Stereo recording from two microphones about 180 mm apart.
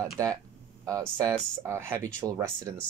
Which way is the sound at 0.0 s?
20° right (ahead or behind).